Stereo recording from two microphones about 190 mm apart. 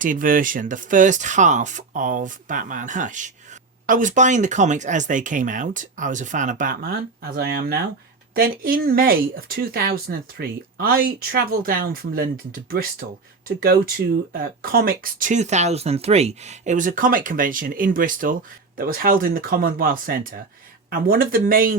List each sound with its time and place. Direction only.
0.0 s speech: 45° right (ahead or behind)